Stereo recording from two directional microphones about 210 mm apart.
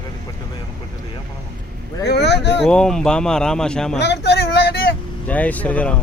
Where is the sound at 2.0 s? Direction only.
50° left (ahead or behind).